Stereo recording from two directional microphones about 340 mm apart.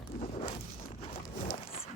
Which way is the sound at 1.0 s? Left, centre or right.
Centre.